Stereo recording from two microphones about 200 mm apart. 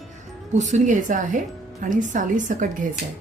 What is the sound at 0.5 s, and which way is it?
A woman's voice, 35° right (ahead or behind).